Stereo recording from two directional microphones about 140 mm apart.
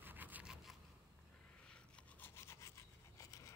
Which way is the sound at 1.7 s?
15° left (ahead or behind).